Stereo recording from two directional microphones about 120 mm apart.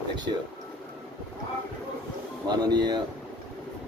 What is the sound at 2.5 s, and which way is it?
Speech, 35° right (ahead or behind).